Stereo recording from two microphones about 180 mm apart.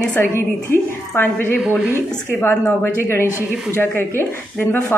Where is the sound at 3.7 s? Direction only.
10° left (ahead or behind).